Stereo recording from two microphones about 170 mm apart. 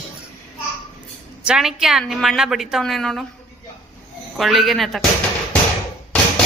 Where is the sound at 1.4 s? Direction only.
5° right (ahead or behind).